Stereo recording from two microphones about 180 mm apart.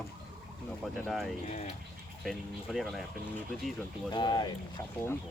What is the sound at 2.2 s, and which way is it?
Speech, centre (ahead or behind).